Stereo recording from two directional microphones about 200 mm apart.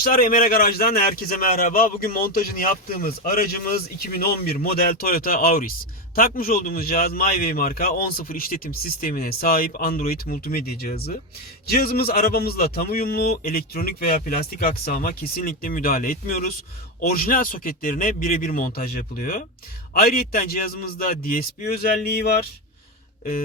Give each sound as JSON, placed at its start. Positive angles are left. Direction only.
{"t": 0.0, "sound": "a man's voice", "side_deg": 45}